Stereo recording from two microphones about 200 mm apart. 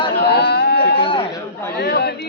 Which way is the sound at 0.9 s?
25° left (ahead or behind).